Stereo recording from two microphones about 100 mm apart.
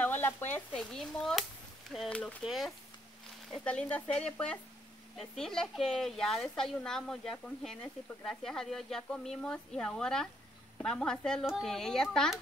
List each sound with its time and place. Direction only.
0.0 s sizzle: 20° left (ahead or behind)
0.7 s speech: 5° left (ahead or behind)
3.5 s a woman's voice: 10° left (ahead or behind)